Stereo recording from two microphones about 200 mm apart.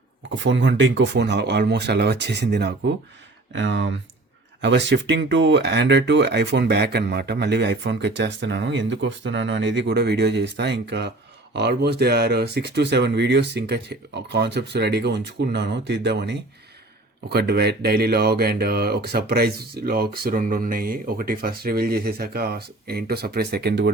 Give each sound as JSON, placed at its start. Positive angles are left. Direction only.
{"t": 0.3, "sound": "speech", "side_deg": -65}